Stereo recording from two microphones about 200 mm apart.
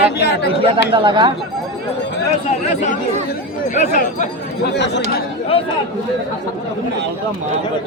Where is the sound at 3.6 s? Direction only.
40° left (ahead or behind).